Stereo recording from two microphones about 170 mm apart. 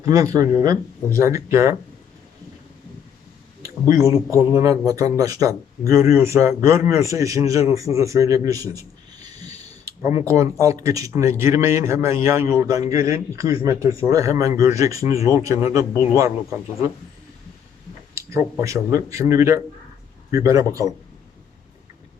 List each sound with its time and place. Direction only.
0.0 s speech: 20° right (ahead or behind)
3.6 s a sound: 20° right (ahead or behind)
4.3 s speech: 20° right (ahead or behind)
9.4 s mechanisms: 20° right (ahead or behind)
10.2 s speech: 20° right (ahead or behind)
18.3 s speech: 20° right (ahead or behind)